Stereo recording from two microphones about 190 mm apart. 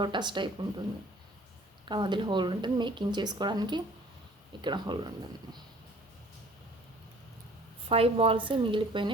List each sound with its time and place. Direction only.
0.0 s speech: 25° right (ahead or behind)
1.8 s speech: 25° right (ahead or behind)
7.9 s a woman's voice: 30° right (ahead or behind)